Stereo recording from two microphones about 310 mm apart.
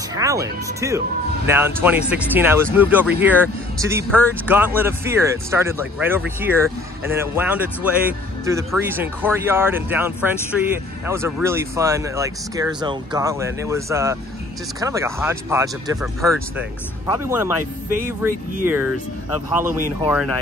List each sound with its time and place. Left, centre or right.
0.1 s speech: centre